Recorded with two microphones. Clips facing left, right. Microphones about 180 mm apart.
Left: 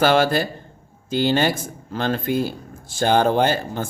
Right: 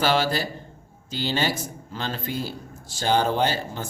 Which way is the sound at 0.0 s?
55° left (ahead or behind).